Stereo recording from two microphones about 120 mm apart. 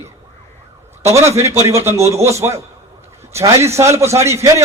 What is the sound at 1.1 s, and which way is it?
A man's voice, 25° right (ahead or behind).